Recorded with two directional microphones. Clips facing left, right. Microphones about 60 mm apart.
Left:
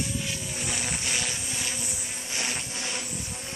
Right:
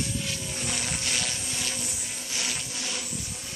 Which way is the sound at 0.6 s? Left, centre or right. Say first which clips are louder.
Left 1 dB; centre.